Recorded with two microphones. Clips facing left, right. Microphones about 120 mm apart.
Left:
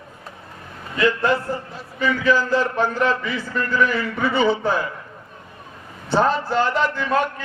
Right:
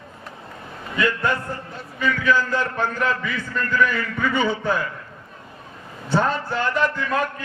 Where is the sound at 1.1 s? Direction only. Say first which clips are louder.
Left 6 dB; 25° left (ahead or behind).